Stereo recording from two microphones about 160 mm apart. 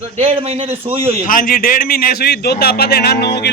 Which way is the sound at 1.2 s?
60° left (ahead or behind).